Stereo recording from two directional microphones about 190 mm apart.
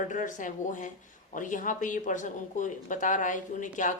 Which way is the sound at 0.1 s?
40° left (ahead or behind).